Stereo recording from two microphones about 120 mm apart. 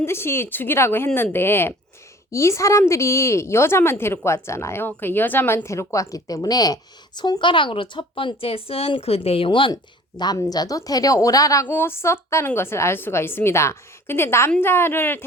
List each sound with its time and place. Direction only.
0.0 s a woman's voice: 20° left (ahead or behind)